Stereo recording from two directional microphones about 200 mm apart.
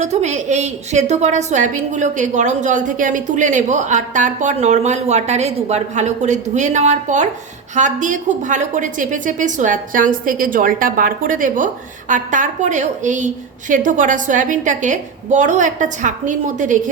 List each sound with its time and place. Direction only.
0.0 s a woman's voice: 35° right (ahead or behind)